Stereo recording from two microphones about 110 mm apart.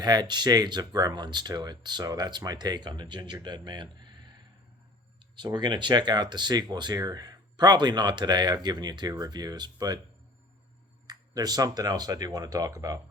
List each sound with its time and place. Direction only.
0.0 s speech: 40° right (ahead or behind)
5.4 s speech: 40° right (ahead or behind)
11.0 s speech: 40° right (ahead or behind)